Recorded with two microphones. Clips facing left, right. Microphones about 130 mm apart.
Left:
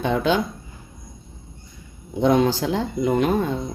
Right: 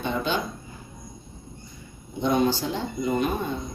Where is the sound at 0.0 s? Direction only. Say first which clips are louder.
Left 6 dB; 90° left.